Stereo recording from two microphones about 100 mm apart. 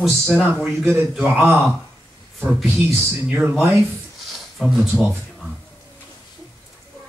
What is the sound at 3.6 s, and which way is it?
Speech, 25° right (ahead or behind).